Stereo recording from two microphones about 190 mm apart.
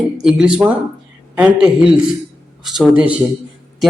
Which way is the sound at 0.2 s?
5° right (ahead or behind).